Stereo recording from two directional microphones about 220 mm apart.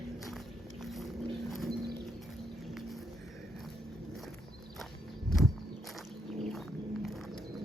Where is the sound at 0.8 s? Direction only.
Centre (ahead or behind).